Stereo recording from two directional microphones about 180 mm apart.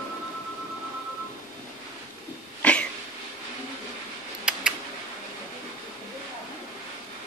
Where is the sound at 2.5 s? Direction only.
5° left (ahead or behind).